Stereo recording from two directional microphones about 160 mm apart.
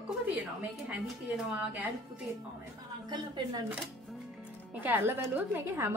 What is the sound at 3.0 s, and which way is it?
Speech, 25° right (ahead or behind).